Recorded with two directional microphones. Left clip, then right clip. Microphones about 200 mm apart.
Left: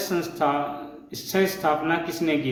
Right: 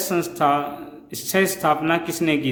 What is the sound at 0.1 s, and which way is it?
Speech, 35° right (ahead or behind).